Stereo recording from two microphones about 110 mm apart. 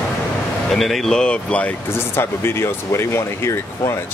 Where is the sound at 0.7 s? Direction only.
Centre (ahead or behind).